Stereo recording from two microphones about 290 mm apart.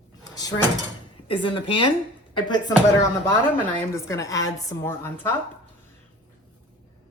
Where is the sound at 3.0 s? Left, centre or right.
Centre.